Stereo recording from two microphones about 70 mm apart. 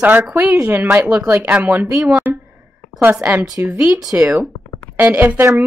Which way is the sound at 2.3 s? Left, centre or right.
Centre.